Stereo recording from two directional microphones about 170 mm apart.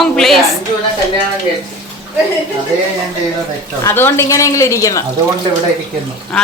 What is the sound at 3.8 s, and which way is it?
Speech, 15° left (ahead or behind).